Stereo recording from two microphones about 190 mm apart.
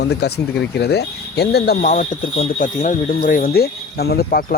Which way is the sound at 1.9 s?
40° left (ahead or behind).